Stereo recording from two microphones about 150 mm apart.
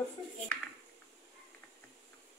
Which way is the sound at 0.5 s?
10° left (ahead or behind).